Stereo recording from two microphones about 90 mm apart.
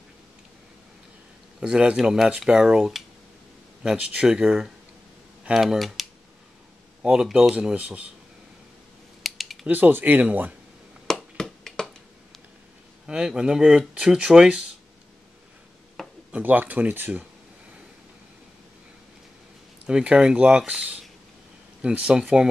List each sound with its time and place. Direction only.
1.6 s speech: 10° right (ahead or behind)
9.2 s typing: centre (ahead or behind)
9.7 s speech: 20° right (ahead or behind)
11.1 s finger snapping: 5° left (ahead or behind)
13.0 s speech: 10° right (ahead or behind)
16.3 s speech: 15° right (ahead or behind)
19.9 s speech: 10° right (ahead or behind)